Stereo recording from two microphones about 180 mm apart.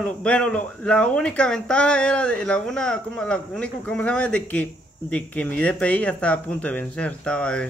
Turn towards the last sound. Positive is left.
turn(degrees=5)  # may be behind; listen again after turning